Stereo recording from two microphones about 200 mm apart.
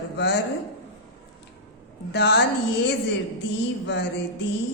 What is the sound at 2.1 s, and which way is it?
Speech, 55° left (ahead or behind).